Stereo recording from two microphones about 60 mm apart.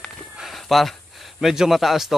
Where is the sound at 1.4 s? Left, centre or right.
Centre.